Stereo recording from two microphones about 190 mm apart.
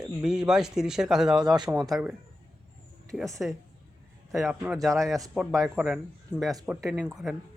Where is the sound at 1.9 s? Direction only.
5° right (ahead or behind).